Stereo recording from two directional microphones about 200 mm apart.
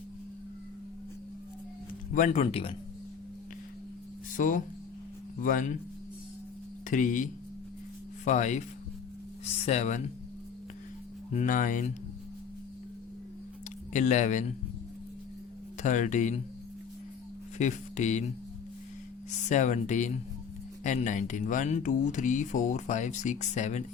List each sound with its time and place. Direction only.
2.1 s speech: 35° left (ahead or behind)
4.4 s speech: 40° left (ahead or behind)
6.9 s speech: 40° left (ahead or behind)
11.3 s speech: 40° left (ahead or behind)
13.9 s speech: 35° left (ahead or behind)
15.8 s speech: 35° left (ahead or behind)
17.6 s speech: 35° left (ahead or behind)
19.3 s speech: 35° left (ahead or behind)